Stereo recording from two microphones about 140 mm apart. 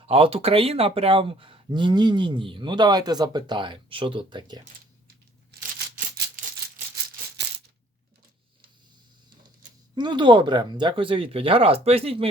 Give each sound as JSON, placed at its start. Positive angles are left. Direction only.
{"t": 0.0, "sound": "speech", "side_deg": -45}
{"t": 9.9, "sound": "speech", "side_deg": -35}